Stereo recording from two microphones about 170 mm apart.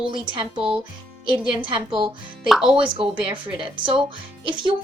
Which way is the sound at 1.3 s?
30° right (ahead or behind).